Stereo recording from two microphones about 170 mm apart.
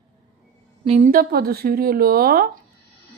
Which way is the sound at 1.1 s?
60° right (ahead or behind).